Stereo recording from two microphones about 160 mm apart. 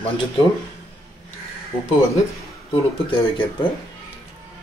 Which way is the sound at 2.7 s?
30° left (ahead or behind).